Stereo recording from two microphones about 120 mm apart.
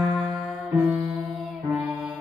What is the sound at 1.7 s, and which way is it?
Music, 10° right (ahead or behind).